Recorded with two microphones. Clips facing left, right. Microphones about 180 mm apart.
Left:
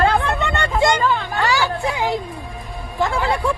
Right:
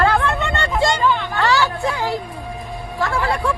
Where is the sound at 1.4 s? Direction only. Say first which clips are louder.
Right 2 dB; 15° left (ahead or behind).